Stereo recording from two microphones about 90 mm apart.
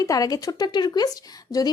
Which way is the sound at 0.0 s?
40° left (ahead or behind).